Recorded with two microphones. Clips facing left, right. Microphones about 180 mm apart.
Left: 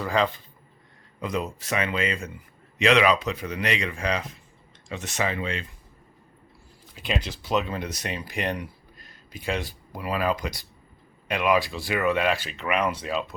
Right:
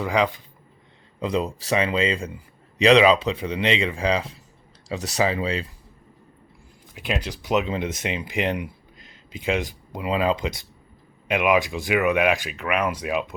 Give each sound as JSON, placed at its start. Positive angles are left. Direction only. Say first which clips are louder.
{"t": 0.0, "sound": "speech", "louder": "right 2 dB", "side_deg": -15}
{"t": 1.2, "sound": "a man's voice", "louder": "right 4 dB", "side_deg": -30}
{"t": 6.9, "sound": "speech", "louder": "right 2 dB", "side_deg": -10}